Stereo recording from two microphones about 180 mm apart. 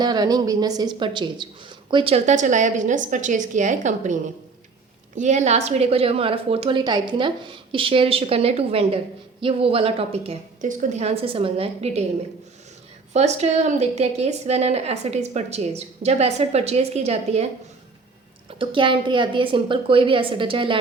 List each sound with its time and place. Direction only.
0.0 s a woman's voice: 20° right (ahead or behind)
10.7 s a woman's voice: 45° right (ahead or behind)
13.1 s a woman's voice: 40° right (ahead or behind)
18.6 s a woman's voice: 25° right (ahead or behind)